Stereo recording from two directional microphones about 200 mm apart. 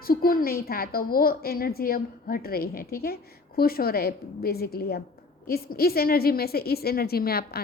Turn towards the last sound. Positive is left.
turn(degrees=50)  # may be behind; listen again after turning